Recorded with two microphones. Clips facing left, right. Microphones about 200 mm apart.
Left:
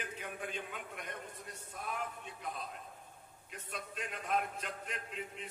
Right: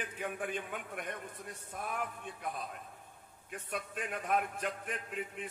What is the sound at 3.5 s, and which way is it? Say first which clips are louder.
Speech: right 5 dB; 50° right (ahead or behind).